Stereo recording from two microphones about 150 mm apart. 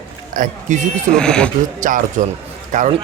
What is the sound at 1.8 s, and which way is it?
A man's voice, 60° right (ahead or behind).